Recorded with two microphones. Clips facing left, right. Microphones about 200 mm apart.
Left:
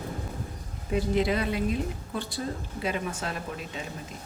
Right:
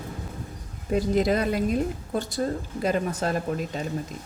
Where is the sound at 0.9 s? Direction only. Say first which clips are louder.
Right 3 dB; 40° right (ahead or behind).